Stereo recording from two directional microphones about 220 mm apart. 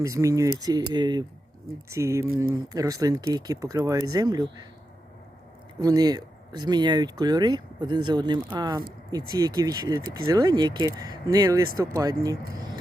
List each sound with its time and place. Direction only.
0.0 s speech: 15° right (ahead or behind)
5.8 s speech: 15° right (ahead or behind)